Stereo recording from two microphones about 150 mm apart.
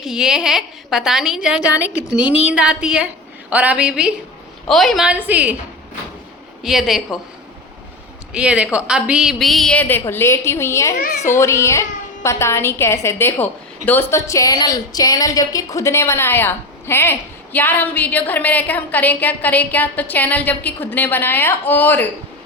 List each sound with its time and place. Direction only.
0.0 s a woman's voice: 5° right (ahead or behind)
6.6 s a woman's voice: centre (ahead or behind)
8.3 s a woman's voice: 5° right (ahead or behind); by 10.9 s 20° left (ahead or behind)
10.9 s a child's voice: 80° left
11.2 s a woman's voice: 20° left (ahead or behind)